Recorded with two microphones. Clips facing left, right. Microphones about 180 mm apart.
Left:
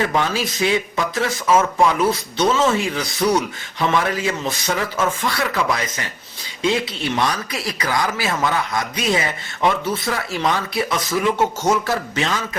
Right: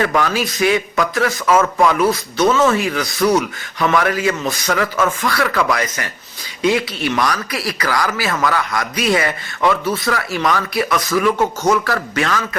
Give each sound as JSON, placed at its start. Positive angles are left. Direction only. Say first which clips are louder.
{"t": 0.0, "sound": "a man's voice", "louder": "right 3 dB", "side_deg": 25}